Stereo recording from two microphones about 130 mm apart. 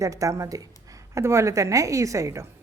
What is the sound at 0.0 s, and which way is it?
A woman's voice, 25° right (ahead or behind).